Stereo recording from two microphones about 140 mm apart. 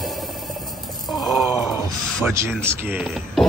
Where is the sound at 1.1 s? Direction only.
Centre (ahead or behind).